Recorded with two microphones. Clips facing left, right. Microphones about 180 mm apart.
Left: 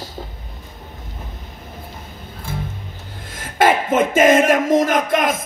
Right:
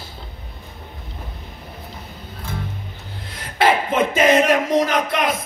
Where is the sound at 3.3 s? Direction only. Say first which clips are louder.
Left 2 dB; 45° left (ahead or behind).